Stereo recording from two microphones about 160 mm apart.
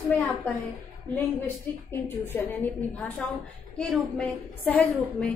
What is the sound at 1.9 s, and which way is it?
A woman's voice, 15° left (ahead or behind).